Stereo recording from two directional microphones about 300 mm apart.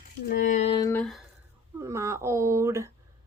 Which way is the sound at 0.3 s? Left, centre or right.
Left.